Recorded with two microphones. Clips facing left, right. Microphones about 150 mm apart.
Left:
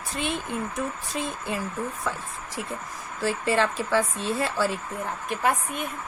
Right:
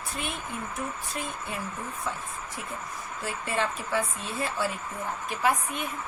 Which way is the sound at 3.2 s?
90° left.